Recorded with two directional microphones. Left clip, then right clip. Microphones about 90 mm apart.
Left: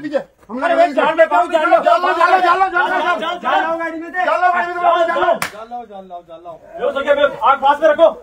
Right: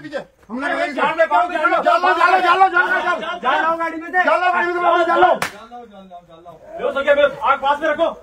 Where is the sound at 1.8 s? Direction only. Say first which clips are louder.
Left 1 dB; 15° left (ahead or behind).